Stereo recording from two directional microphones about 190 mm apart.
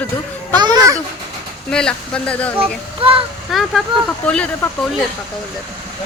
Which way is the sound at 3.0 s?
30° right (ahead or behind).